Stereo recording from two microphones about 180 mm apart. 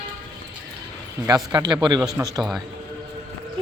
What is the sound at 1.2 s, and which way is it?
Speech, 20° right (ahead or behind).